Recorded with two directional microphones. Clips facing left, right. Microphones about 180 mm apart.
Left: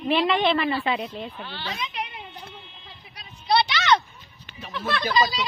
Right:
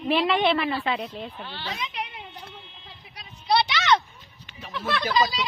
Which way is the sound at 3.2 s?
10° right (ahead or behind).